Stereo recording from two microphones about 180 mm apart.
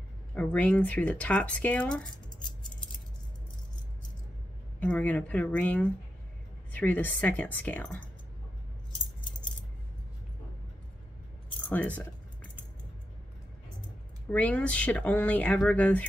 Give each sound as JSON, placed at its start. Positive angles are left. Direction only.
{"t": 0.3, "sound": "speech", "side_deg": 5}
{"t": 4.7, "sound": "speech", "side_deg": 10}
{"t": 11.7, "sound": "speech", "side_deg": 10}
{"t": 14.3, "sound": "speech", "side_deg": 5}